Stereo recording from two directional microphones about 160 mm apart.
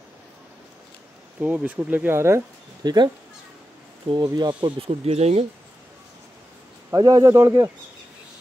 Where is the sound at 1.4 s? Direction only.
10° right (ahead or behind); by 5.4 s 40° right (ahead or behind).